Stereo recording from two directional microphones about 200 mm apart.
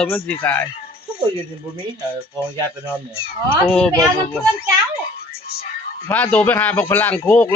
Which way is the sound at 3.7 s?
10° left (ahead or behind).